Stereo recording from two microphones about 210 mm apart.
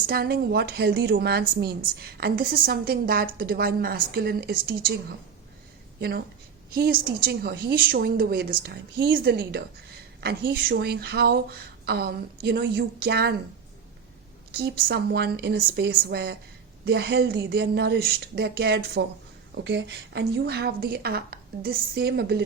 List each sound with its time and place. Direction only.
0.1 s speech: 50° right (ahead or behind)
6.0 s a woman's voice: 50° right (ahead or behind)
14.5 s speech: 50° right (ahead or behind)